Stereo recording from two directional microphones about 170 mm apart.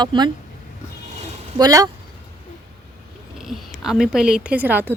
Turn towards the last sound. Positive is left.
turn(degrees=-10)  # may be behind; listen again after turning